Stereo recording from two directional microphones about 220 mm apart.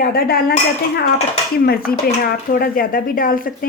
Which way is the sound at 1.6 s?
45° left (ahead or behind).